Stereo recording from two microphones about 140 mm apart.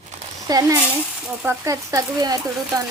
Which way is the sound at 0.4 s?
25° right (ahead or behind).